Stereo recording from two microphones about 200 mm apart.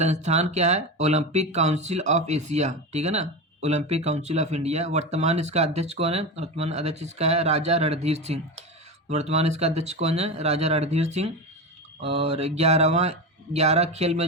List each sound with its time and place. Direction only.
0.0 s speech: 35° right (ahead or behind)